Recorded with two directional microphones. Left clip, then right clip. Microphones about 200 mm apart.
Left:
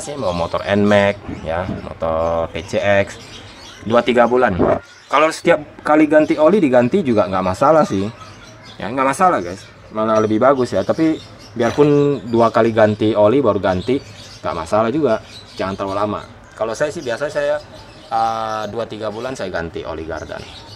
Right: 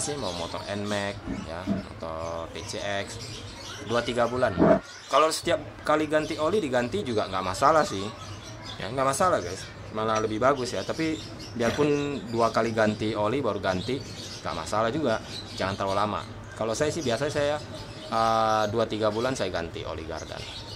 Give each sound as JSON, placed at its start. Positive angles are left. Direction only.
{"t": 0.0, "sound": "a man's voice", "side_deg": 30}